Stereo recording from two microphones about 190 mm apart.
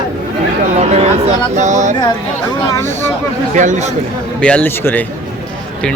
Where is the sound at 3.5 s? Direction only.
40° right (ahead or behind).